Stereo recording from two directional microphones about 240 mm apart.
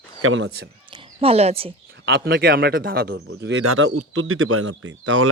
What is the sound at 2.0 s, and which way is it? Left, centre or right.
A man's voice, right.